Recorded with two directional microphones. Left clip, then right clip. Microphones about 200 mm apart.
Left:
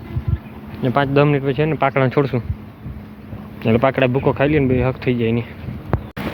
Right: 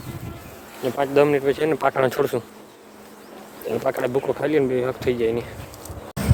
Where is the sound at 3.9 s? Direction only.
15° right (ahead or behind).